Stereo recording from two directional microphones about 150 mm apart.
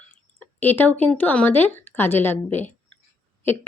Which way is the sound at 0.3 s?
15° left (ahead or behind).